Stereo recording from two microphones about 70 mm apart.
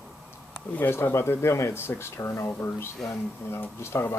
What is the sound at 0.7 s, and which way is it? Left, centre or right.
Speech, left.